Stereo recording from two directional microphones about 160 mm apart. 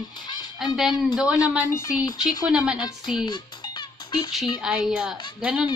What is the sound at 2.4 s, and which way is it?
Speech, 5° right (ahead or behind).